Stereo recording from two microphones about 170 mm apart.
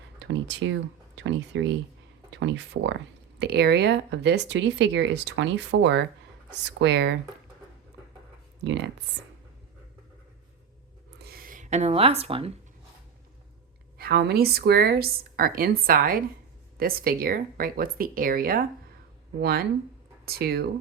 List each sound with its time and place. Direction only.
0.2 s speech: 90° right
8.6 s speech: 90° right
11.2 s speech: 60° right (ahead or behind); by 12.5 s 35° right (ahead or behind)
14.0 s speech: 70° right (ahead or behind)